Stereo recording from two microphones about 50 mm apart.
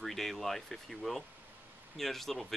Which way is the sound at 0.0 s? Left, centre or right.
Centre.